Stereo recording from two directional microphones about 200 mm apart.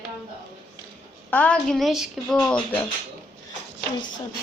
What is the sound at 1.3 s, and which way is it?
Speech, 5° left (ahead or behind).